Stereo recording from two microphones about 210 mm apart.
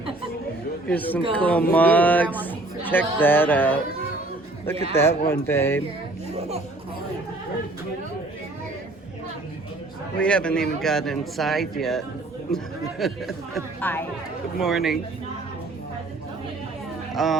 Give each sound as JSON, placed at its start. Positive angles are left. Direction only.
{"t": 0.9, "sound": "speech", "side_deg": 5}
{"t": 10.2, "sound": "a man's voice", "side_deg": 5}
{"t": 14.6, "sound": "a man's voice", "side_deg": 0}
{"t": 17.2, "sound": "a man's voice", "side_deg": 0}